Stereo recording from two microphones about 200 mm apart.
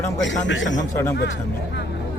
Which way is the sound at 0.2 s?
70° left (ahead or behind).